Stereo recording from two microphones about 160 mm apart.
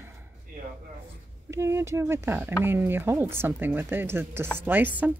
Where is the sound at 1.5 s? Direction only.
15° right (ahead or behind).